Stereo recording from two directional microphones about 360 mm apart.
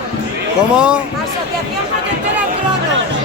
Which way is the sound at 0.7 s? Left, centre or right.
Centre.